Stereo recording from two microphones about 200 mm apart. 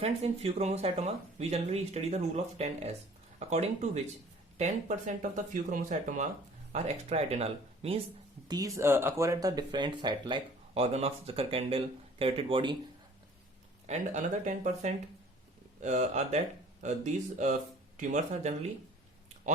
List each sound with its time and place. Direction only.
0.0 s speech: 30° right (ahead or behind)
8.4 s speech: 20° right (ahead or behind)
13.8 s speech: 35° right (ahead or behind)